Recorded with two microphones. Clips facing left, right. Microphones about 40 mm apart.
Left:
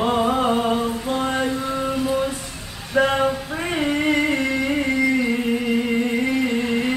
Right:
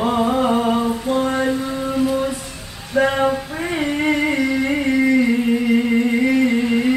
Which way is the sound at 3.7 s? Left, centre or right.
Centre.